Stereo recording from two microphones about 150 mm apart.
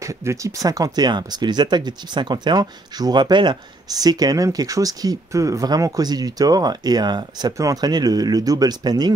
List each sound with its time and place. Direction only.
0.0 s speech: 20° right (ahead or behind)